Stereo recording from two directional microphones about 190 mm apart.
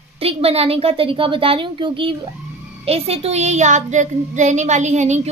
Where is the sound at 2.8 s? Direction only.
30° right (ahead or behind).